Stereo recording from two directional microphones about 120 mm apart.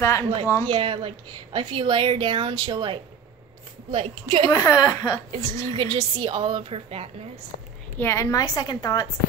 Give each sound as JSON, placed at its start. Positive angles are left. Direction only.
{"t": 0.2, "sound": "a woman's voice", "side_deg": -50}
{"t": 4.5, "sound": "a woman's voice", "side_deg": 30}
{"t": 5.3, "sound": "a woman's voice", "side_deg": -45}
{"t": 8.0, "sound": "a woman's voice", "side_deg": 25}